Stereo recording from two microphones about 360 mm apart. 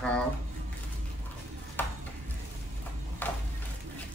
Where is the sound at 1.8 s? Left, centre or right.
Centre.